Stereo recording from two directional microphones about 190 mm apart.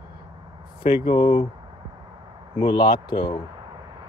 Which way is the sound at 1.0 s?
25° left (ahead or behind).